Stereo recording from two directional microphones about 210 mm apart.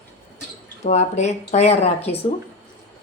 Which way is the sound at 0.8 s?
30° left (ahead or behind).